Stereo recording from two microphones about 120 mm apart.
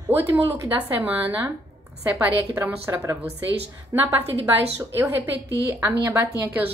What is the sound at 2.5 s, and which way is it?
A woman's voice, 20° right (ahead or behind).